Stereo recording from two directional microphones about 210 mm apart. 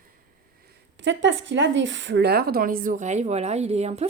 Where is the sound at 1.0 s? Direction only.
60° right (ahead or behind).